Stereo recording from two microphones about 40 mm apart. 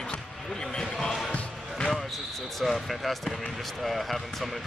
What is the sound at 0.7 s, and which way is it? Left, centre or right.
Speech, centre.